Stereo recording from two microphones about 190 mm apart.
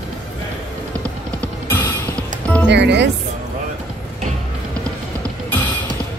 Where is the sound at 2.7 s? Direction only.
65° right (ahead or behind).